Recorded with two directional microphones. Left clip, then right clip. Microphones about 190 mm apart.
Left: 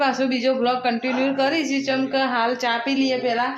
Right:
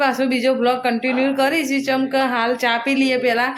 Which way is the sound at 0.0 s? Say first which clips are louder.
Right 3 dB; 15° right (ahead or behind).